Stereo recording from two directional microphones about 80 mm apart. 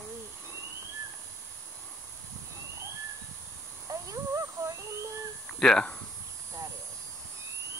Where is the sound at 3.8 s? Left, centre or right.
Right.